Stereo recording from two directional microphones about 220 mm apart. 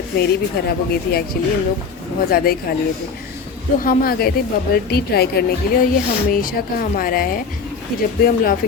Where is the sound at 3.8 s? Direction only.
40° left (ahead or behind).